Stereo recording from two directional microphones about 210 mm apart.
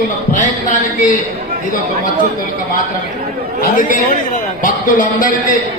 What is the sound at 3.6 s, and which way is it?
A man's voice, 40° left (ahead or behind).